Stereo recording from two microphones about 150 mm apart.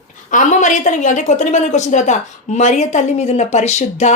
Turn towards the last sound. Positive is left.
turn(degrees=50)  # may be behind; listen again after turning